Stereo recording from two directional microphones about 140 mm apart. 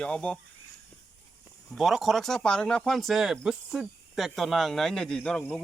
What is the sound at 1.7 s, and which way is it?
Speech, centre (ahead or behind).